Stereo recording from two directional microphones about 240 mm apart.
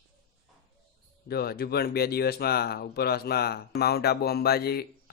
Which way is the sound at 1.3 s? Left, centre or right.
Left.